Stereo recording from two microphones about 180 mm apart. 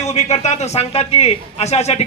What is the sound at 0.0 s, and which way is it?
A man's voice, 40° left (ahead or behind).